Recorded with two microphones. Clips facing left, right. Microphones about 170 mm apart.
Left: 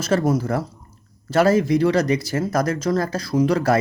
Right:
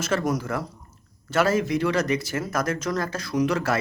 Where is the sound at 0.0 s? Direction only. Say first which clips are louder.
Left 5 dB; 35° left (ahead or behind).